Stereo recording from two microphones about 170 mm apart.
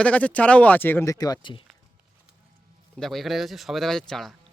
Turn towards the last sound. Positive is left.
turn(degrees=5)  # may be behind; listen again after turning